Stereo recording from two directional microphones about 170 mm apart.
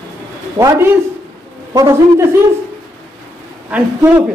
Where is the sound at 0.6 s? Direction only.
15° right (ahead or behind).